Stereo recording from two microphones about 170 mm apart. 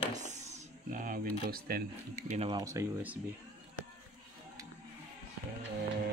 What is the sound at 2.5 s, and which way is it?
Speech, 20° right (ahead or behind).